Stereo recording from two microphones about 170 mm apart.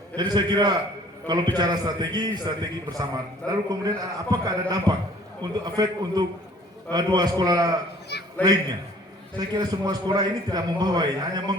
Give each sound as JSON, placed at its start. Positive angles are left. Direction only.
{"t": 0.2, "sound": "a man's voice", "side_deg": -25}
{"t": 8.1, "sound": "a sound", "side_deg": 75}
{"t": 9.4, "sound": "a man's voice", "side_deg": -25}